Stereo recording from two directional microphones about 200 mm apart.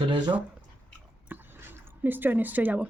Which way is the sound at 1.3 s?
10° right (ahead or behind).